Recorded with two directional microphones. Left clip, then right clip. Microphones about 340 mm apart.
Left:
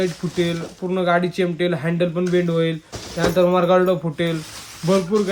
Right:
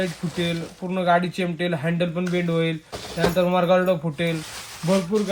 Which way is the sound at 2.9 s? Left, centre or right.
Right.